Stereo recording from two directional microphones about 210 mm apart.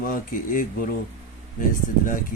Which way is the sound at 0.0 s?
40° left (ahead or behind).